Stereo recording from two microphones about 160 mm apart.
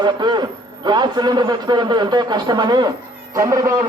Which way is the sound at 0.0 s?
25° right (ahead or behind).